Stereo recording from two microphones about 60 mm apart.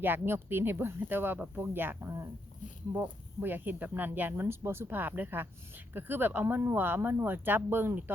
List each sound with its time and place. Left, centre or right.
0.0 s speech: right
2.9 s speech: right